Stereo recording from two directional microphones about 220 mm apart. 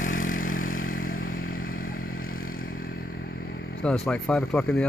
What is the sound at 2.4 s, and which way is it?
Vehicle, 40° left (ahead or behind).